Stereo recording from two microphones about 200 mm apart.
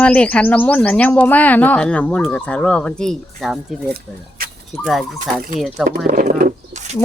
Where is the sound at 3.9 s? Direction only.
45° right (ahead or behind).